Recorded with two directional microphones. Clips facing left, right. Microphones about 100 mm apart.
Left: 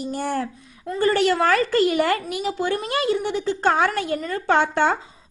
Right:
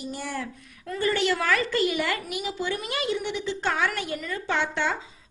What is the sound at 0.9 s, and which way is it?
A woman's voice, 35° left (ahead or behind).